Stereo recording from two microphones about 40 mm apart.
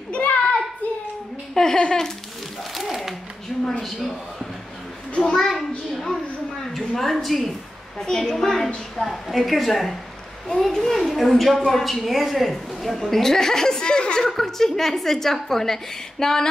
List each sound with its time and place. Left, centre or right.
0.1 s child singing: left
1.5 s speech: centre
2.7 s speech: centre
5.3 s a woman's voice: centre
10.5 s a woman's voice: centre
14.2 s a woman's voice: centre